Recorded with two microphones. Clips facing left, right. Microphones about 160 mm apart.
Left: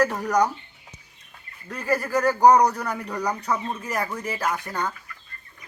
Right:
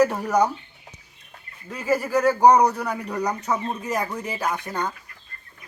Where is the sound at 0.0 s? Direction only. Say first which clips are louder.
Right 2 dB; 10° right (ahead or behind).